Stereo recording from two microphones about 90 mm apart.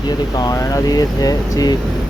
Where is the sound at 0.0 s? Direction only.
50° left (ahead or behind).